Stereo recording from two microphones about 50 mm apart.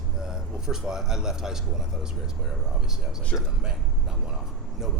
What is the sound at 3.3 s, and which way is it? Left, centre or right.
Speech, left.